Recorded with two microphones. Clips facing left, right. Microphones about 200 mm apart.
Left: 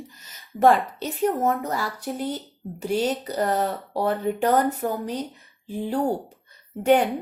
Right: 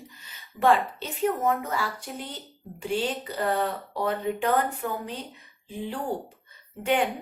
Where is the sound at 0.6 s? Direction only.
40° left (ahead or behind).